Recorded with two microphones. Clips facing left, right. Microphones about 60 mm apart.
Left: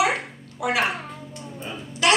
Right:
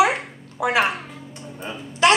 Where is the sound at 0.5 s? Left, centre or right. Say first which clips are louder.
Right 4 dB; right.